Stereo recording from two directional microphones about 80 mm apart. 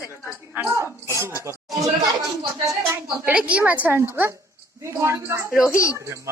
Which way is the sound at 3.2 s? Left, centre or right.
Centre.